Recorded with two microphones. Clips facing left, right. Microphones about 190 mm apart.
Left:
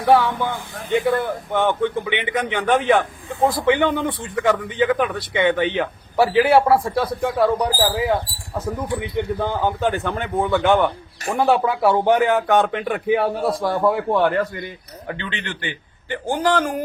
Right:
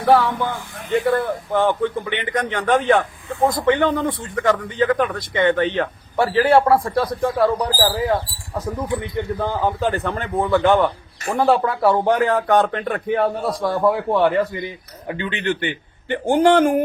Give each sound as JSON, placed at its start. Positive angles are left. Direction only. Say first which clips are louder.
{"t": 0.0, "sound": "speech", "louder": "even", "side_deg": 0}
{"t": 15.0, "sound": "speech", "louder": "right 6 dB", "side_deg": -15}